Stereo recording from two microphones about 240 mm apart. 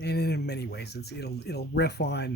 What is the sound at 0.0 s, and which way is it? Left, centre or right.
Speech, left.